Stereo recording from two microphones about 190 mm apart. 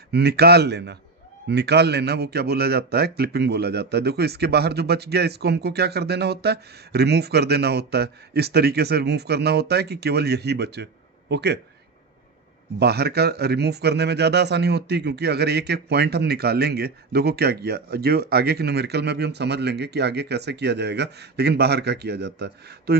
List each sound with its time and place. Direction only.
0.1 s a man's voice: 60° right (ahead or behind)
12.8 s a man's voice: 60° right (ahead or behind)